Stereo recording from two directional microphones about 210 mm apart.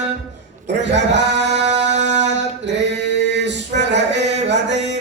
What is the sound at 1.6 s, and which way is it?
Mantra, 35° right (ahead or behind).